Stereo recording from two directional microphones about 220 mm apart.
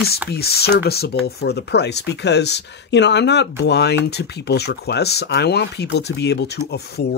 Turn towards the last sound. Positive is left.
turn(degrees=50)  # may be behind; listen again after turning